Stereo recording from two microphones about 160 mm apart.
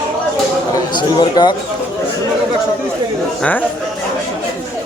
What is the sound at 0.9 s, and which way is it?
Speech, 25° left (ahead or behind).